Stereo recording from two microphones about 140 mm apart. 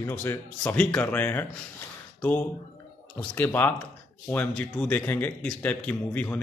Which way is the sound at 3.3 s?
15° left (ahead or behind).